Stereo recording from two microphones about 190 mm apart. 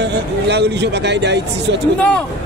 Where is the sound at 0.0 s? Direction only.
65° right (ahead or behind).